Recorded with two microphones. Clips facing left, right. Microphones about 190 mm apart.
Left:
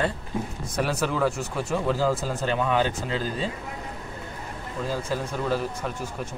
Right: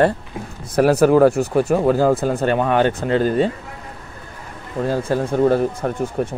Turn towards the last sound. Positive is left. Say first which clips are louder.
# right 10 dB
turn(degrees=-55)  # may be behind; listen again after turning